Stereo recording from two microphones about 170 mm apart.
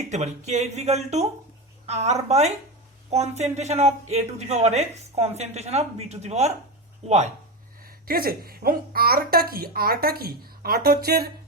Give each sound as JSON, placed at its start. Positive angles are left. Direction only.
{"t": 0.0, "sound": "speech", "side_deg": -40}
{"t": 7.8, "sound": "a woman's voice", "side_deg": -60}